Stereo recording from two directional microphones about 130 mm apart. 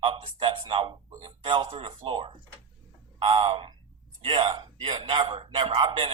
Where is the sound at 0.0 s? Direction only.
40° right (ahead or behind).